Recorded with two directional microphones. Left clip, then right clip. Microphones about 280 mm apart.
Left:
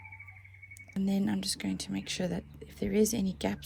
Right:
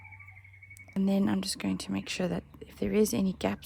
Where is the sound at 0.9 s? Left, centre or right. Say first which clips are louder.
Right 4 dB; centre.